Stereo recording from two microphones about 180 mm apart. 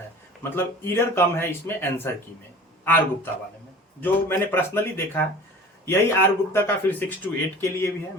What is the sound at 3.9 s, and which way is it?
Speech, 10° left (ahead or behind).